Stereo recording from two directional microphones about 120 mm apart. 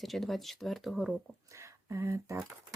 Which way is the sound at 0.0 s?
Centre (ahead or behind).